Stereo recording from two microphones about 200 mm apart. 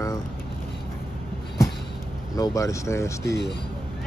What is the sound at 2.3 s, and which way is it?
Speech, 15° left (ahead or behind).